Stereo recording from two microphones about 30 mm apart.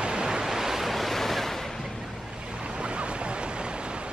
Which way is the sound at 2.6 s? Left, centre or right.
Right.